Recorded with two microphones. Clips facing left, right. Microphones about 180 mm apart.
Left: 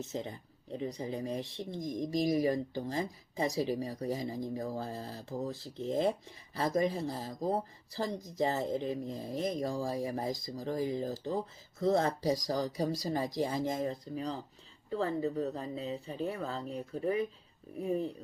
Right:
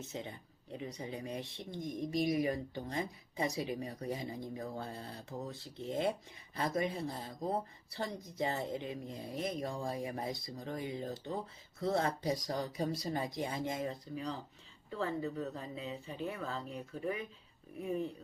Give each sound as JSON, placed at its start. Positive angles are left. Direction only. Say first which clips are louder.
{"t": 0.1, "sound": "speech", "louder": "left 5 dB", "side_deg": 35}